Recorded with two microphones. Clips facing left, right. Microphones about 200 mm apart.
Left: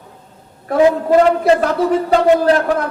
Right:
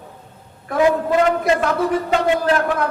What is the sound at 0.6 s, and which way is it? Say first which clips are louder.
A man's voice: left 4 dB; 35° left (ahead or behind).